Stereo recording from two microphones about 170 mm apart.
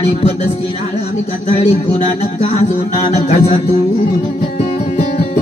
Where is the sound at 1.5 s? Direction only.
40° left (ahead or behind).